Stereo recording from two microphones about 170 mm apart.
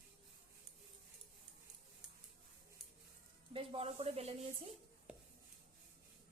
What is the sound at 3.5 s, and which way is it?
Speech, 35° right (ahead or behind).